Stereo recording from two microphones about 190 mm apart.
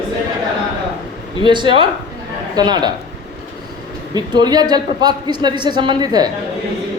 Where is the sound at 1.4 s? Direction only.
25° right (ahead or behind).